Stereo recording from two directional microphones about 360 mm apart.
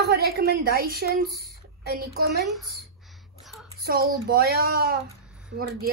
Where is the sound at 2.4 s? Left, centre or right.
Centre.